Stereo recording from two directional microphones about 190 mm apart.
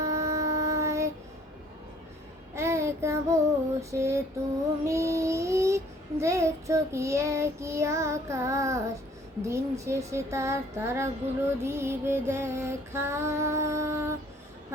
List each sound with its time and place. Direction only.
0.0 s child singing: 15° right (ahead or behind)
2.6 s child singing: 15° right (ahead or behind)
3.8 s female singing: 15° right (ahead or behind)
4.9 s child singing: 15° right (ahead or behind)
9.4 s music: 15° right (ahead or behind)